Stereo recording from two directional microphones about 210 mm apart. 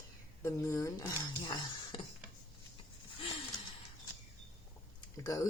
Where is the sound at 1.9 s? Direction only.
20° left (ahead or behind).